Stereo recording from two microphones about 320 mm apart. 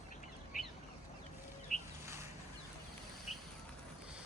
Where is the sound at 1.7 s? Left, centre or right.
Left.